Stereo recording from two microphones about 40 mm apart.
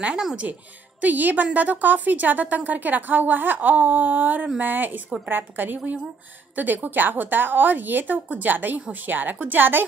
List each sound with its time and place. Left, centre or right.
0.4 s speech: right
1.0 s a woman's voice: right